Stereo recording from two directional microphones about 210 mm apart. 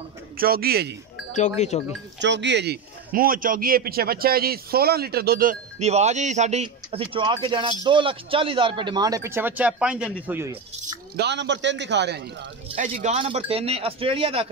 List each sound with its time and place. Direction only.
0.4 s a man's voice: 45° right (ahead or behind)
1.6 s speech: 35° left (ahead or behind)
2.1 s a man's voice: 55° right (ahead or behind); by 10.6 s 10° right (ahead or behind)
11.1 s a man's voice: 55° right (ahead or behind)
12.7 s a man's voice: 35° right (ahead or behind)